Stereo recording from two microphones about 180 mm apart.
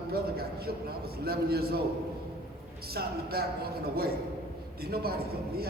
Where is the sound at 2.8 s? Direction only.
60° right (ahead or behind).